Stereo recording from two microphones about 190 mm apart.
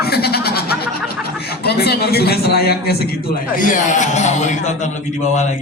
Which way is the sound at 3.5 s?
45° left (ahead or behind).